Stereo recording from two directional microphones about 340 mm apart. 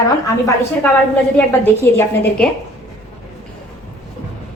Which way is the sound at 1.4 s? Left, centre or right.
Centre.